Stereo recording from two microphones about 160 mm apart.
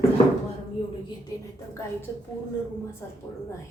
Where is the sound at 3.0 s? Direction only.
15° left (ahead or behind).